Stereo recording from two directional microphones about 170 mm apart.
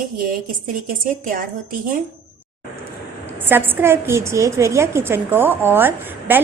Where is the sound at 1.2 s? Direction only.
55° right (ahead or behind).